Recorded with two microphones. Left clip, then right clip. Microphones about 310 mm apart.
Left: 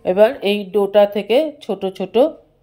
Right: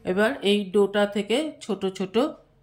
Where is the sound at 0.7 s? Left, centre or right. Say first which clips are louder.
Left 10 dB; left.